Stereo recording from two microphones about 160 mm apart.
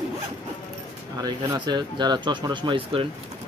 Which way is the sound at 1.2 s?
25° right (ahead or behind).